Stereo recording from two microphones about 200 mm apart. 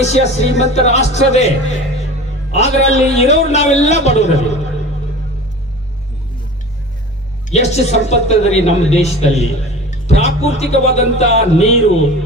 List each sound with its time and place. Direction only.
0.0 s a man's voice: 35° left (ahead or behind)
7.5 s a man's voice: 35° left (ahead or behind)